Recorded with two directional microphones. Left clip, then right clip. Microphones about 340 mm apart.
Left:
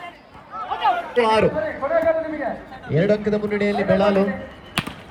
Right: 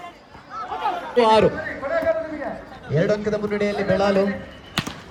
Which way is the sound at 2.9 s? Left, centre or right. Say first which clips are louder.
Left 2 dB; centre.